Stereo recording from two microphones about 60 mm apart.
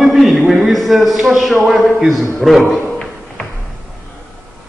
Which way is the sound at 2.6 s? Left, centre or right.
Centre.